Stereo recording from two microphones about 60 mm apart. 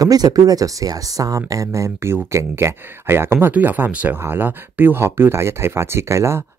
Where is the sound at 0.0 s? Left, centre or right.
Right.